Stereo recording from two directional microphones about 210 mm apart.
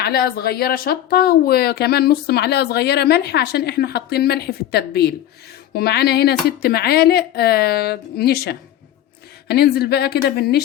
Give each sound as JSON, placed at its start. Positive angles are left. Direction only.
{"t": 0.0, "sound": "speech", "side_deg": 45}